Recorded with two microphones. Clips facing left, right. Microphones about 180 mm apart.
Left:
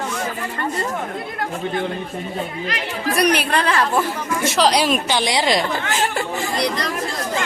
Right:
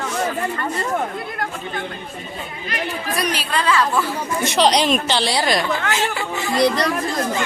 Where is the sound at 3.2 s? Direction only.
65° left (ahead or behind).